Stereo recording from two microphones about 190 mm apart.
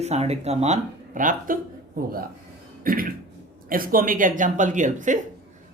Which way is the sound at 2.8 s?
50° right (ahead or behind).